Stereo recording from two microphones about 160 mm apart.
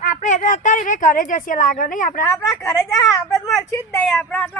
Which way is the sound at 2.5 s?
5° left (ahead or behind).